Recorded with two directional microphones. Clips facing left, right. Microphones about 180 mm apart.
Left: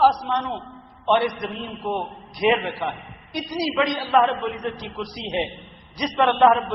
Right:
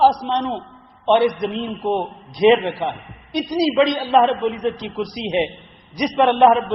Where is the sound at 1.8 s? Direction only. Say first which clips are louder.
Right 4 dB; 25° right (ahead or behind).